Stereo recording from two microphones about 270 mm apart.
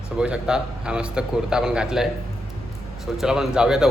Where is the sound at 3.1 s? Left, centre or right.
Centre.